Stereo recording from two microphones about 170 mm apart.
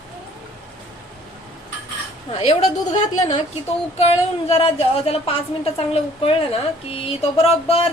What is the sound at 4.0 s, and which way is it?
A woman's voice, 35° left (ahead or behind).